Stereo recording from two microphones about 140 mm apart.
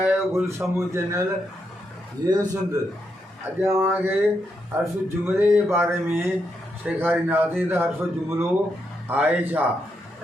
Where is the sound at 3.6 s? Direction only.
15° right (ahead or behind).